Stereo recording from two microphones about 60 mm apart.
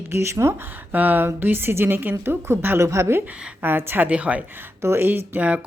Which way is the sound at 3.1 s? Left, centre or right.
Right.